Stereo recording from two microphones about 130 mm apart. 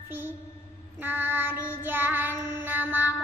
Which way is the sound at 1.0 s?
15° right (ahead or behind).